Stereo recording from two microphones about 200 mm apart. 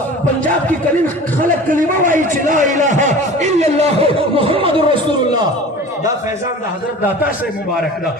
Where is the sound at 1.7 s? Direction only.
40° right (ahead or behind).